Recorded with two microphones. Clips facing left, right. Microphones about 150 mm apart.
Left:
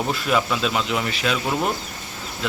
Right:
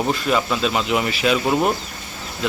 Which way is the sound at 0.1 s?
Centre (ahead or behind).